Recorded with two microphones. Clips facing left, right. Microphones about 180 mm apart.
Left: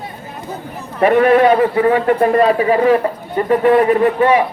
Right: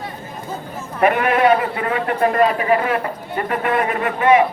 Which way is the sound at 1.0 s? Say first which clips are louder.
Left 5 dB; 35° left (ahead or behind).